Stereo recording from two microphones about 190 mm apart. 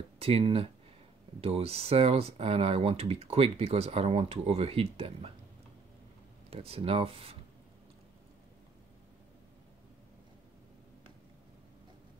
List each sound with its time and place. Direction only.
0.2 s speech: 30° right (ahead or behind)
6.5 s speech: 30° right (ahead or behind)